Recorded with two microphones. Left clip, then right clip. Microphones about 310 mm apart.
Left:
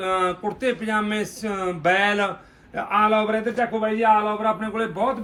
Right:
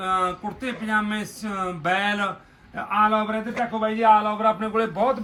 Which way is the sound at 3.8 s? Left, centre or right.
Centre.